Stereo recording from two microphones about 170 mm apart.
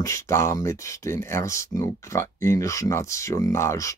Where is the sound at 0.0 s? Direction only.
15° left (ahead or behind).